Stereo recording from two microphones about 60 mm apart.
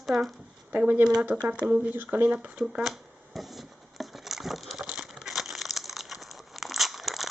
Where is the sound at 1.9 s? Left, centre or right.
Right.